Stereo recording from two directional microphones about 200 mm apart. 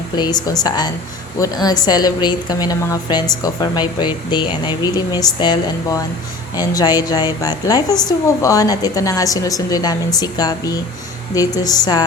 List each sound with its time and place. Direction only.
0.4 s a woman's voice: 20° left (ahead or behind)